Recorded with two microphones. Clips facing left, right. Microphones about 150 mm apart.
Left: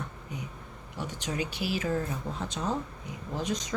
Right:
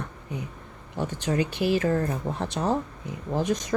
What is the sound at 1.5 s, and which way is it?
A woman's voice, 55° right (ahead or behind).